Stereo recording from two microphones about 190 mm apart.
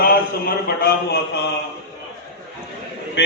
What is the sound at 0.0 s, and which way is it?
A man's voice, 50° left (ahead or behind).